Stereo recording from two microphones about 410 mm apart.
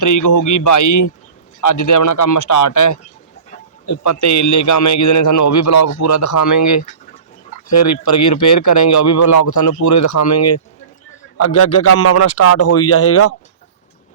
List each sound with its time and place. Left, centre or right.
0.0 s a man's voice: left